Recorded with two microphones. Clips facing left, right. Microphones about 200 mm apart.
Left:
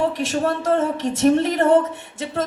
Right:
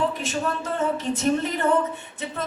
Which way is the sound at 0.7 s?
80° left.